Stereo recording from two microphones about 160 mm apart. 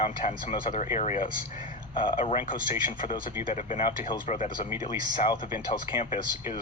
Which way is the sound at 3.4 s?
50° left (ahead or behind).